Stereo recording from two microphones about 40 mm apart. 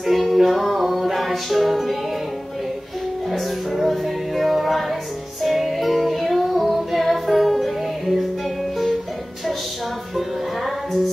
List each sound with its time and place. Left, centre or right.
0.0 s music: centre
3.3 s music: centre
10.1 s music: centre